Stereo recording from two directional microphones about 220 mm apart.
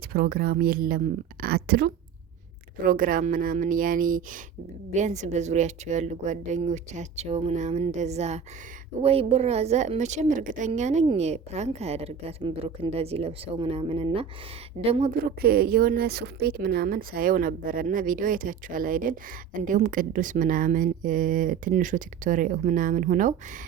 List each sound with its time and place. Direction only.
0.1 s a woman's voice: 45° right (ahead or behind); by 15.1 s 25° right (ahead or behind)
15.2 s speech: 45° right (ahead or behind)